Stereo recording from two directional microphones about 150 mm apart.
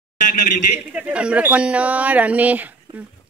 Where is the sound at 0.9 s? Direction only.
5° right (ahead or behind).